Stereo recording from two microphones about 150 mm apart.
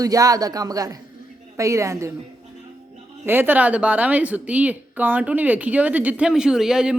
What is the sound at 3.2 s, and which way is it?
A woman's voice, 15° right (ahead or behind).